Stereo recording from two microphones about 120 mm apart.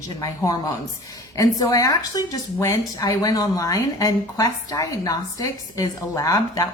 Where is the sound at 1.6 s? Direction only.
30° left (ahead or behind).